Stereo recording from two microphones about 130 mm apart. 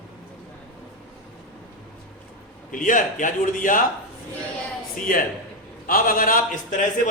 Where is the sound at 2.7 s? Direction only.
90° left.